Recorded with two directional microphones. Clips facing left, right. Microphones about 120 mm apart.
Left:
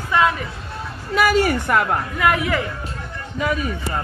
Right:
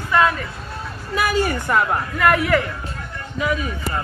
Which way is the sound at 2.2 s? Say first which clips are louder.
Right 3 dB; 15° left (ahead or behind).